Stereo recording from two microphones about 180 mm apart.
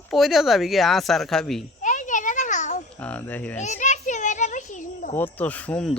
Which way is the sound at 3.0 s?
10° left (ahead or behind).